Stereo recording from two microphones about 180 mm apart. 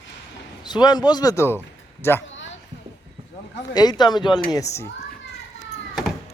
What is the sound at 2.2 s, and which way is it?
Basketball bounce, 90° left.